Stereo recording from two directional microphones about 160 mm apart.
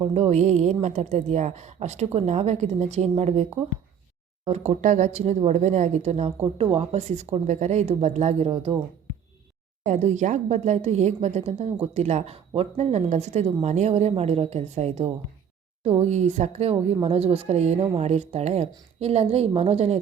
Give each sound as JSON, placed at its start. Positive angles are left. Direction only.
{"t": 0.0, "sound": "a woman's voice", "side_deg": -40}
{"t": 4.4, "sound": "a woman's voice", "side_deg": -40}
{"t": 9.8, "sound": "a woman's voice", "side_deg": -45}